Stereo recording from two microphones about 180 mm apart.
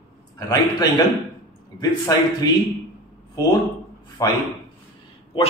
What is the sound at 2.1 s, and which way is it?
Speech, 20° left (ahead or behind).